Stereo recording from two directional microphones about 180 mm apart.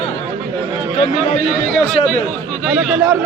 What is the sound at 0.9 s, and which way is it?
Speech, 40° left (ahead or behind).